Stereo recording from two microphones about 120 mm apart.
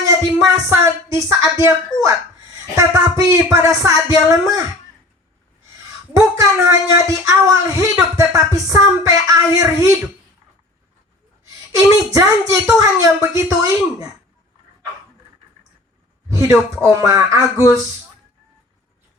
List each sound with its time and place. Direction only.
0.0 s a woman's voice: 30° right (ahead or behind)
6.1 s a woman's voice: 25° right (ahead or behind)
11.4 s a sound: 30° right (ahead or behind)
13.0 s a woman's voice: 25° right (ahead or behind)
16.3 s a sound: 25° right (ahead or behind)
16.8 s a woman's voice: 25° right (ahead or behind)